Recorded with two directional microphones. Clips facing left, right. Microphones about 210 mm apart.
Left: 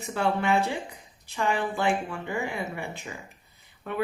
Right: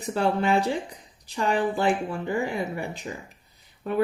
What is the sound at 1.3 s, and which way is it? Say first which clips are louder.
Speech: right 3 dB; 35° right (ahead or behind).